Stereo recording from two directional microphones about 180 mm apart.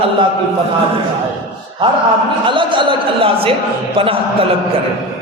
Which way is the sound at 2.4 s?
25° right (ahead or behind).